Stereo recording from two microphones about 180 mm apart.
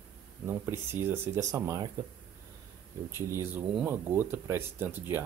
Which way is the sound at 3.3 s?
10° right (ahead or behind).